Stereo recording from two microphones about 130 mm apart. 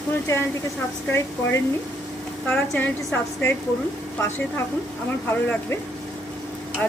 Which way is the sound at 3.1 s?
15° left (ahead or behind).